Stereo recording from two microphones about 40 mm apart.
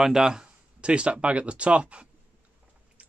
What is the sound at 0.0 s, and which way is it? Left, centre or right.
Speech, centre.